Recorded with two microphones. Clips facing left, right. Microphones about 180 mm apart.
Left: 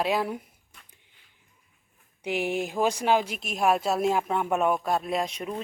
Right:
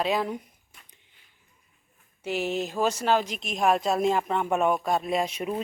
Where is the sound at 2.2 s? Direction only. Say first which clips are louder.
Even; 15° left (ahead or behind).